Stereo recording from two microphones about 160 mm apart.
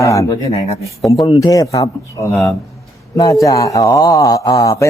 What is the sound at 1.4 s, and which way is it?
A man's voice, 20° left (ahead or behind).